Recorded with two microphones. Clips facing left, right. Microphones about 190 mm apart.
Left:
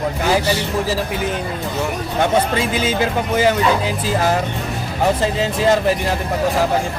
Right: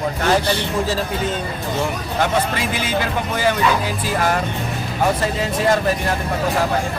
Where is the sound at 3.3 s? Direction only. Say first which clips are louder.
Left 3 dB; 20° left (ahead or behind).